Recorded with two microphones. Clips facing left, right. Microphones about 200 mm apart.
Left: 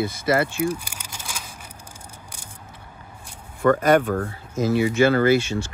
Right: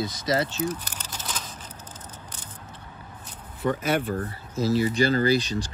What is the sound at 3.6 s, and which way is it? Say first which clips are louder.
Speech: left 8 dB; 45° left (ahead or behind).